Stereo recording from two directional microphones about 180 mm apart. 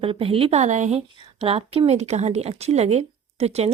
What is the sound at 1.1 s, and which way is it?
Speech, 30° right (ahead or behind).